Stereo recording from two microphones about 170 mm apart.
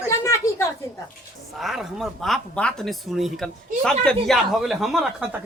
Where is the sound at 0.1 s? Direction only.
15° left (ahead or behind).